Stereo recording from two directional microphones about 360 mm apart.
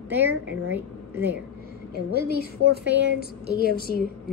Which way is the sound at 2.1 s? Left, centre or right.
Left.